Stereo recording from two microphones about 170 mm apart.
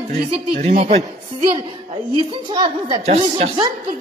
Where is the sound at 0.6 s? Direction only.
40° right (ahead or behind).